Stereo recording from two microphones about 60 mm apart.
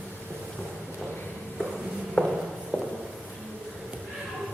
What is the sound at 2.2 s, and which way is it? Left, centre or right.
Walk, centre.